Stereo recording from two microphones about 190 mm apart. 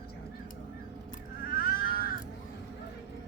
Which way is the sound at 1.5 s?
50° left (ahead or behind).